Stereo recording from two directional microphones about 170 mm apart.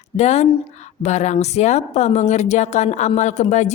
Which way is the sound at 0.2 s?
40° left (ahead or behind).